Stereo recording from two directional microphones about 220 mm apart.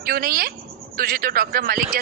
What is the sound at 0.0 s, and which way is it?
A man's voice, 40° right (ahead or behind).